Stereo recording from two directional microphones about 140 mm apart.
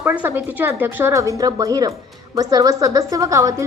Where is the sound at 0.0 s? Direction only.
10° right (ahead or behind).